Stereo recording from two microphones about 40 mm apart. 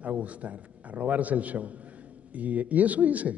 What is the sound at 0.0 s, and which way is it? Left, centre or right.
A man's voice, right.